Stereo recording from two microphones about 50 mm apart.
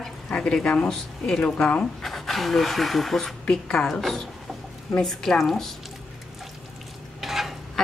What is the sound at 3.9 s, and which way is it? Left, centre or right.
Speech, centre.